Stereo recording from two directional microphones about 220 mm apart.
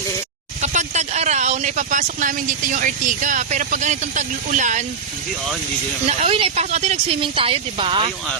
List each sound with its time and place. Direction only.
0.6 s speech: 30° right (ahead or behind)
6.1 s speech: 30° right (ahead or behind)